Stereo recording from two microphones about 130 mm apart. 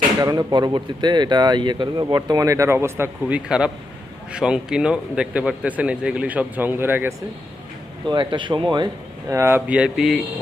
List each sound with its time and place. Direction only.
0.2 s speech: 30° right (ahead or behind)
8.0 s speech: 35° right (ahead or behind)
9.3 s speech: 20° right (ahead or behind); by 10.2 s 5° right (ahead or behind)